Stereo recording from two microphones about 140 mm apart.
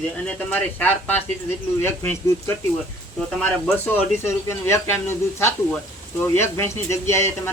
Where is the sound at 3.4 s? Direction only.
15° left (ahead or behind).